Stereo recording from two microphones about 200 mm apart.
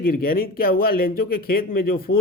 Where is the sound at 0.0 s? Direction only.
45° left (ahead or behind).